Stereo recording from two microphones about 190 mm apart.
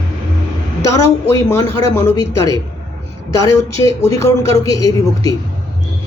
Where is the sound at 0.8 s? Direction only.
15° left (ahead or behind).